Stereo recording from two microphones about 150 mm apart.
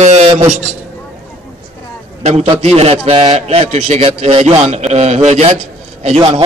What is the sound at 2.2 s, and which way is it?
A man's voice, 45° right (ahead or behind).